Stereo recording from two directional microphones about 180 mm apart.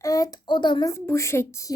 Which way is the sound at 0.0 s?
20° left (ahead or behind).